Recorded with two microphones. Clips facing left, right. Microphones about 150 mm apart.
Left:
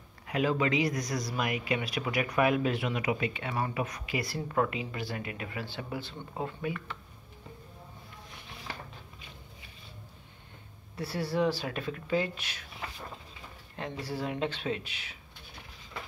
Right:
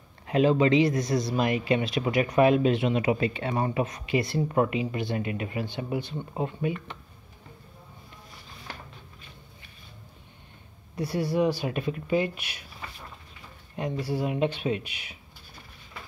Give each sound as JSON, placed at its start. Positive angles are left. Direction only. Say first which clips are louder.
{"t": 0.3, "sound": "speech", "louder": "right 7 dB", "side_deg": -25}
{"t": 11.0, "sound": "speech", "louder": "right 4 dB", "side_deg": -15}
{"t": 13.7, "sound": "speech", "louder": "right 6 dB", "side_deg": -15}